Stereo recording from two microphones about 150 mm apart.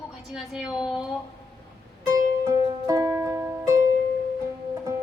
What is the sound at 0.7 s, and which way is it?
Speech, 5° right (ahead or behind).